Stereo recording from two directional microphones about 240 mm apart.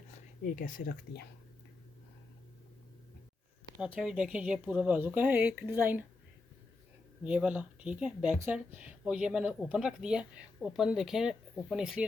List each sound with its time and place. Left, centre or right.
0.4 s speech: left
3.8 s speech: centre
7.3 s speech: centre